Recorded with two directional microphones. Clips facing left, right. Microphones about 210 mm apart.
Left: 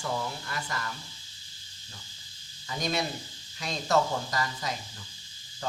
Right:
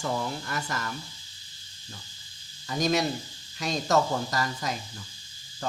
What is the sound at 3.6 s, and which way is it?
Speech, 45° right (ahead or behind).